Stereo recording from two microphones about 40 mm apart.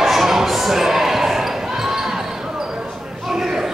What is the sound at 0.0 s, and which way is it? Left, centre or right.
Basketball bounce, centre.